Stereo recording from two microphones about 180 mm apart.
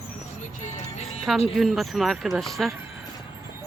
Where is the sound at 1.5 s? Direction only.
Centre (ahead or behind).